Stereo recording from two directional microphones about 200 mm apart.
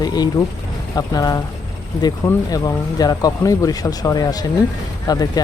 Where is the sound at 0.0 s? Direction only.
20° left (ahead or behind).